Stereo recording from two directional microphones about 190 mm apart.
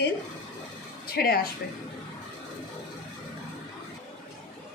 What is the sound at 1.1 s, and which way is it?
Speech, 50° left (ahead or behind).